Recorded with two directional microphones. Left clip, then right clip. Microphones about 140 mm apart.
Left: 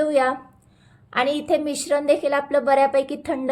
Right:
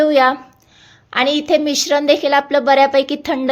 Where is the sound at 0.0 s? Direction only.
20° right (ahead or behind).